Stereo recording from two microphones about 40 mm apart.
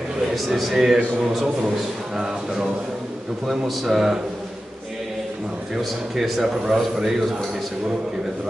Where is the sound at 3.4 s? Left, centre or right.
Centre.